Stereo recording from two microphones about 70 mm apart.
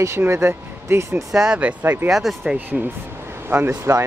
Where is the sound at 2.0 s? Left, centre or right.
Centre.